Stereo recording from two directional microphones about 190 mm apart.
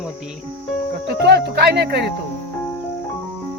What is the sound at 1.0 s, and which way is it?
Speech, 60° right (ahead or behind).